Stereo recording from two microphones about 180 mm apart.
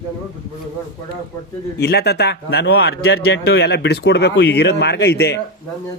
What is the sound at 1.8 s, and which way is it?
Speech, 65° left (ahead or behind).